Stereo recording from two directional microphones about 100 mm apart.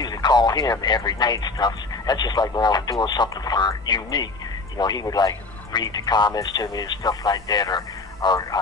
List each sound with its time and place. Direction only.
0.0 s speech: 45° left (ahead or behind)